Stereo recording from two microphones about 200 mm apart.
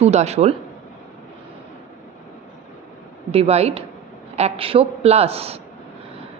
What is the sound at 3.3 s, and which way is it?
Speech, 30° right (ahead or behind).